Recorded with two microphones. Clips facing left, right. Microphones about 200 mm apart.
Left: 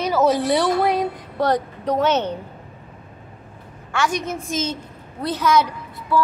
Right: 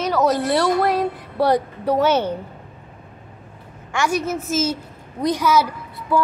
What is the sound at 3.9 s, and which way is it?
A woman's voice, 10° right (ahead or behind).